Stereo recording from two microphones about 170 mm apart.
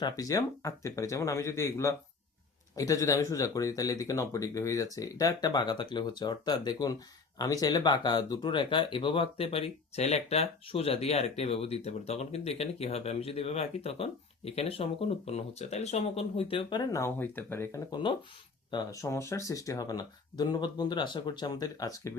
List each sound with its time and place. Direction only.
0.0 s speech: 20° left (ahead or behind)